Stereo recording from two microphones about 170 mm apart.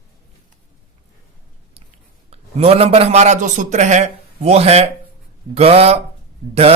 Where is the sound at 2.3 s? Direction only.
35° right (ahead or behind).